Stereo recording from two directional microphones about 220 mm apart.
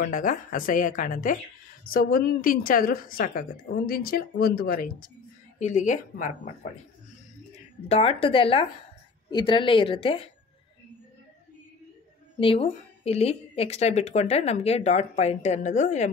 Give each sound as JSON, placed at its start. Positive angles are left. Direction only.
{"t": 0.0, "sound": "a woman's voice", "side_deg": 35}
{"t": 7.9, "sound": "speech", "side_deg": 25}
{"t": 12.4, "sound": "speech", "side_deg": 25}